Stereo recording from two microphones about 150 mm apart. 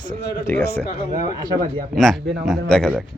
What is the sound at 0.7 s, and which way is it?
Speech, 90° left.